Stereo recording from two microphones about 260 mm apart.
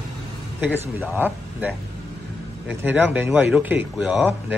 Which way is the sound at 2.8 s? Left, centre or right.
Centre.